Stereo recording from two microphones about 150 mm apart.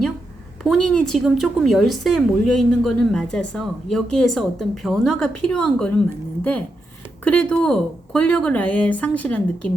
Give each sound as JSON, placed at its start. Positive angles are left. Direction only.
{"t": 0.9, "sound": "a woman's voice", "side_deg": 5}